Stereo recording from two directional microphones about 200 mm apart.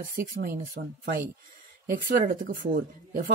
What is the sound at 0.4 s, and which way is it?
Speech, 50° right (ahead or behind).